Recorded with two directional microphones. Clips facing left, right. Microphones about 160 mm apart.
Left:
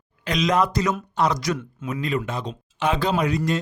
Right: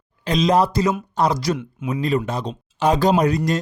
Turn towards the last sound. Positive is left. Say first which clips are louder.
# right 4 dB
turn(degrees=-40)  # may be behind; listen again after turning